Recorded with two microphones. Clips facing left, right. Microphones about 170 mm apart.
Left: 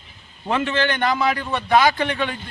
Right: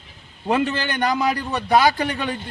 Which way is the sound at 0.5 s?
40° right (ahead or behind).